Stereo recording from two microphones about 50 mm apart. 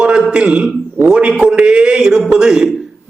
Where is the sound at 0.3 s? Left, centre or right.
Centre.